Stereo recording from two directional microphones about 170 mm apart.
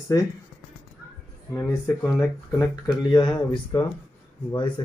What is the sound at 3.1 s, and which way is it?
Speech, 25° left (ahead or behind).